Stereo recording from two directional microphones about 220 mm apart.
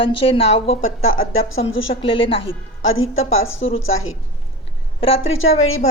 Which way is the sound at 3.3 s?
30° left (ahead or behind).